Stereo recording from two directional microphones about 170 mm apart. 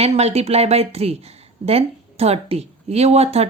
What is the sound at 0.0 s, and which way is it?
A woman's voice, 40° right (ahead or behind).